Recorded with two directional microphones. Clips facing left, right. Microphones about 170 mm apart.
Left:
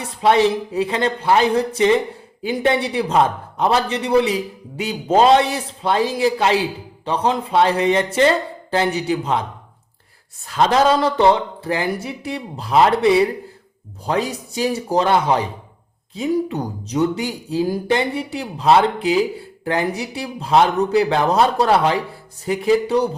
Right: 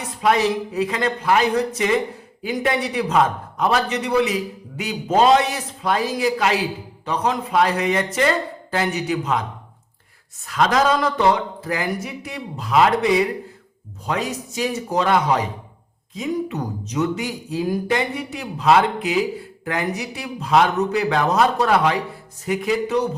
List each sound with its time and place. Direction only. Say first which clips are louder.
0.2 s a man's voice: left 3 dB; 30° left (ahead or behind)
10.4 s a man's voice: left 3 dB; 30° left (ahead or behind)